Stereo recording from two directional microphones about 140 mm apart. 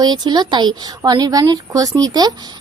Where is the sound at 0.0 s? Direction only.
30° right (ahead or behind).